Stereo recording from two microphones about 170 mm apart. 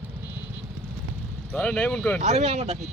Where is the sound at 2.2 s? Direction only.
40° right (ahead or behind).